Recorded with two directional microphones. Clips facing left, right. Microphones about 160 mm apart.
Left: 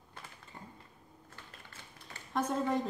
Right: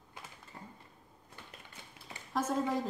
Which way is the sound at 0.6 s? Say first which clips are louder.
Even; centre (ahead or behind).